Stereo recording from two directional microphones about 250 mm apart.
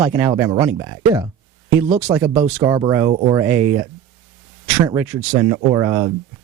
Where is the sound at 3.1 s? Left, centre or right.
Right.